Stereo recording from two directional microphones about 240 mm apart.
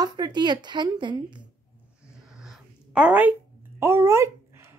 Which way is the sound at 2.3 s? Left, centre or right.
Centre.